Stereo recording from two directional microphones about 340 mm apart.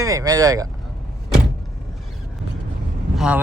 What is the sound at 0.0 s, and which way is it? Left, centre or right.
Speech, centre.